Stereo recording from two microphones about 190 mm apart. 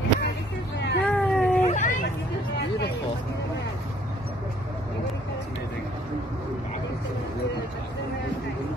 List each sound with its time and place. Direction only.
0.7 s a sound: 65° left (ahead or behind)
1.0 s cat: 5° left (ahead or behind)
1.6 s hubbub: 40° left (ahead or behind)